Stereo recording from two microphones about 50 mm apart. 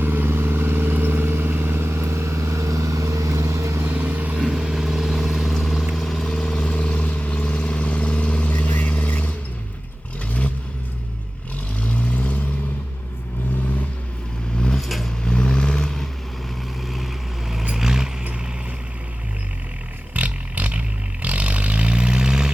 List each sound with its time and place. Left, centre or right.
0.0 s vehicle: right
3.8 s vehicle: right
4.4 s vehicle: centre; by 9.3 s left
11.8 s vehicle: left
14.8 s vehicle: centre
15.2 s vehicle: centre
17.7 s vehicle: centre
20.1 s vehicle: right